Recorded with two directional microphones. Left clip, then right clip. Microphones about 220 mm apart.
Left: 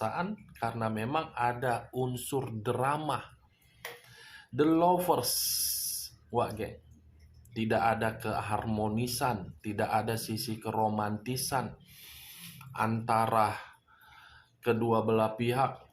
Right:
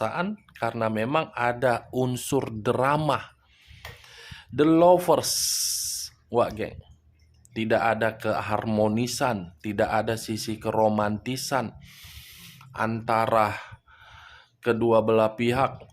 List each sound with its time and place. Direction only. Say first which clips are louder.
0.0 s speech: right 5 dB; 40° right (ahead or behind)